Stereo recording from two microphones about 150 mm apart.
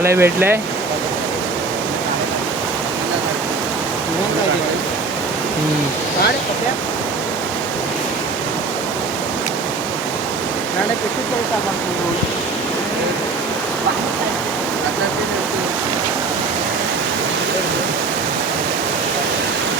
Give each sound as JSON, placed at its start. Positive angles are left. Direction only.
{"t": 0.0, "sound": "speech", "side_deg": -15}